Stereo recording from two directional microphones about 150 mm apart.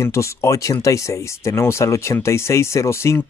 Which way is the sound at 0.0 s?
20° left (ahead or behind).